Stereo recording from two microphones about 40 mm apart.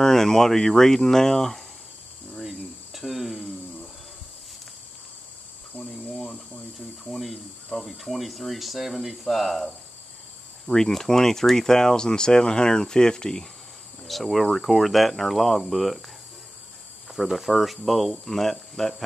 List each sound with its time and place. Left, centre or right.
0.0 s speech: centre
2.3 s cricket: centre
5.7 s cricket: left
7.1 s speech: centre
10.7 s speech: centre
14.0 s speech: centre
17.1 s speech: centre